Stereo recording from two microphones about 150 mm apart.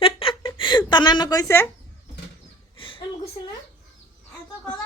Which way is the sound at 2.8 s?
35° left (ahead or behind).